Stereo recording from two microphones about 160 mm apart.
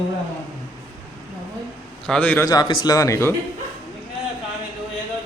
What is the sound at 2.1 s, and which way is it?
Speech, 10° left (ahead or behind).